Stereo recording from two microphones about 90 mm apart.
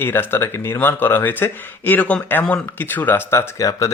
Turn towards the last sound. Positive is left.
turn(degrees=40)  # may be behind; listen again after turning